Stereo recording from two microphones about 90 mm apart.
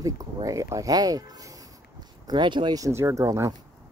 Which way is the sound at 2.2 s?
60° right (ahead or behind).